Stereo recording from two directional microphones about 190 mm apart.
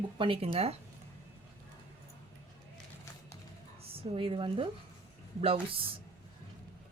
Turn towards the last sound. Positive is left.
turn(degrees=-30)  # may be behind; listen again after turning